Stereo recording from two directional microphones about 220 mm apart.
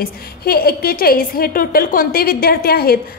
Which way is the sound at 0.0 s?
45° left (ahead or behind).